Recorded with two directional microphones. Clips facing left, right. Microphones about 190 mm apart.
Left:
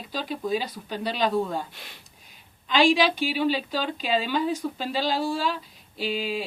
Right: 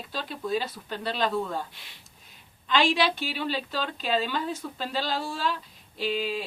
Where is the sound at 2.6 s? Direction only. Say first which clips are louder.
Left 4 dB; 10° left (ahead or behind).